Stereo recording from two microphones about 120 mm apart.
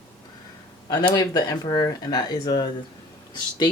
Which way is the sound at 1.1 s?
35° left (ahead or behind).